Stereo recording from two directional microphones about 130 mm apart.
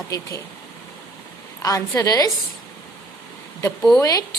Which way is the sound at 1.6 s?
25° left (ahead or behind).